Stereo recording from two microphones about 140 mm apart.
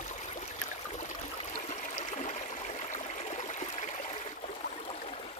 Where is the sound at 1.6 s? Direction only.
55° left (ahead or behind).